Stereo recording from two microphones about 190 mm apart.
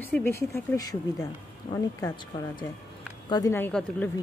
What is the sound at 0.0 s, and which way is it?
Speech, 10° left (ahead or behind).